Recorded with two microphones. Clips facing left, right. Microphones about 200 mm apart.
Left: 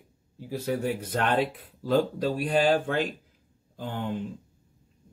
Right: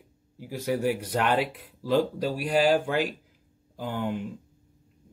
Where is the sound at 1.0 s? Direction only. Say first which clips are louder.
Right 1 dB; 10° right (ahead or behind).